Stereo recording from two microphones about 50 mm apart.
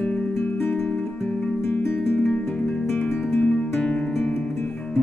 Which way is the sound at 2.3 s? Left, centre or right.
Left.